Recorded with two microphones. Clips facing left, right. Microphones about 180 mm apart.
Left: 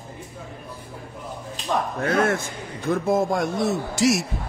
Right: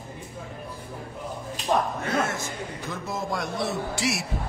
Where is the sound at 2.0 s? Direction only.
60° left (ahead or behind); by 4.3 s 45° left (ahead or behind).